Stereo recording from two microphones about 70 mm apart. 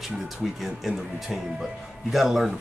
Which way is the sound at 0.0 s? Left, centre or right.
Centre.